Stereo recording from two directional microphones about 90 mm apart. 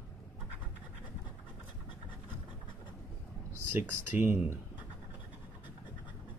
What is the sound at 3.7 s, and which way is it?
Speech, 20° right (ahead or behind).